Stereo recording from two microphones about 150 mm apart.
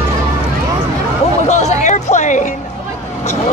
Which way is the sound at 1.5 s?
50° left (ahead or behind).